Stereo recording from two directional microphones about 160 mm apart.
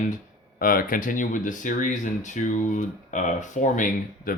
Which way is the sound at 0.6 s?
65° left (ahead or behind).